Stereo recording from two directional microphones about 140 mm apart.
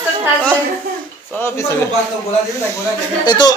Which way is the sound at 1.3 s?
15° left (ahead or behind).